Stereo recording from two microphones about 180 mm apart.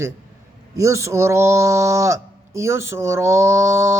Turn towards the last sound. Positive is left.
turn(degrees=-15)  # may be behind; listen again after turning